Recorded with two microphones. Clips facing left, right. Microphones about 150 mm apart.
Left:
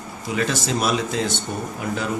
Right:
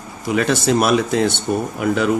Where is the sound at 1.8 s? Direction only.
70° right (ahead or behind).